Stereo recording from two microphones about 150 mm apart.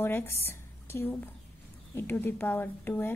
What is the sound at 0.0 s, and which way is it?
Speech, 15° left (ahead or behind).